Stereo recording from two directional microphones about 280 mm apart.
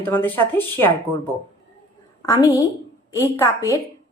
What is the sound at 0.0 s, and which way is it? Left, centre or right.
Speech, centre.